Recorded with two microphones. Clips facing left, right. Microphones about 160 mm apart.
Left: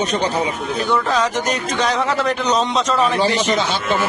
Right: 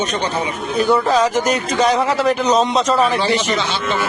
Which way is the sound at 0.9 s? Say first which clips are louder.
Right 4 dB; 5° right (ahead or behind).